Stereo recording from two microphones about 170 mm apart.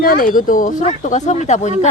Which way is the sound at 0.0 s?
55° left (ahead or behind).